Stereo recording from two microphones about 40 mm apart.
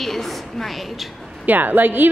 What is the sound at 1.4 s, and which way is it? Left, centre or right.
Speech, right.